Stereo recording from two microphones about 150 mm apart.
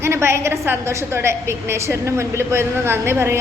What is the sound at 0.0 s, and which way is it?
A woman's voice, 15° right (ahead or behind).